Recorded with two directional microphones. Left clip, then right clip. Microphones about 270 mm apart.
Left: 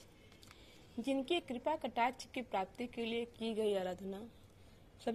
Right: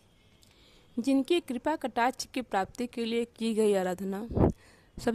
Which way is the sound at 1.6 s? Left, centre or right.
Right.